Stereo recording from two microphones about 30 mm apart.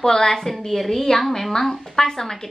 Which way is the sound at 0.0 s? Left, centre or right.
Centre.